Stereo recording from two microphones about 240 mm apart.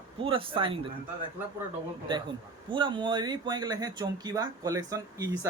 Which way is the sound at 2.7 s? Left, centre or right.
Centre.